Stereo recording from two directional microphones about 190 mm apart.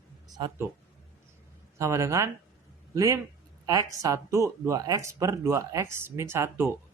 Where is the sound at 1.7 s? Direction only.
15° right (ahead or behind).